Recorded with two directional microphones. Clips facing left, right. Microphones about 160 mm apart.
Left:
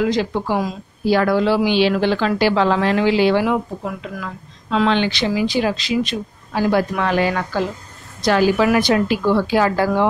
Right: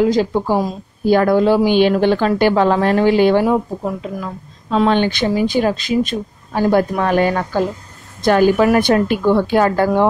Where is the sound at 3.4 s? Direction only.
35° right (ahead or behind); by 10.1 s 50° right (ahead or behind).